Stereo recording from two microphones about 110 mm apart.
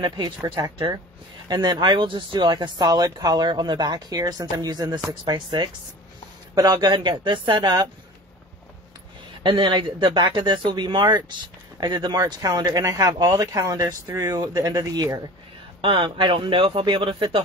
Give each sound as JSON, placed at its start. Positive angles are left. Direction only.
{"t": 0.0, "sound": "speech", "side_deg": -35}
{"t": 9.4, "sound": "speech", "side_deg": -50}
{"t": 15.8, "sound": "speech", "side_deg": -50}